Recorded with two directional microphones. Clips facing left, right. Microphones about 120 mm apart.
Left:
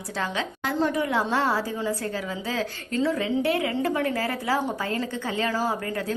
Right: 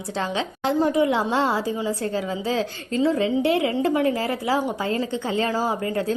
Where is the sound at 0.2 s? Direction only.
25° right (ahead or behind).